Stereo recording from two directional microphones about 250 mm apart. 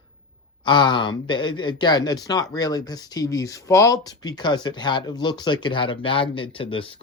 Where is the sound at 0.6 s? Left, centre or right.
Centre.